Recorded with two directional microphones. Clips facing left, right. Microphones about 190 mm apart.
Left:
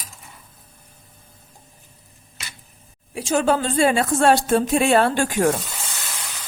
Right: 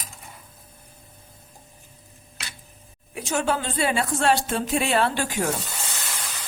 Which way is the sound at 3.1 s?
35° left (ahead or behind).